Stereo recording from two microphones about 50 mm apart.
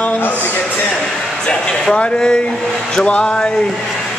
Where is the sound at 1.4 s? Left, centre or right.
Centre.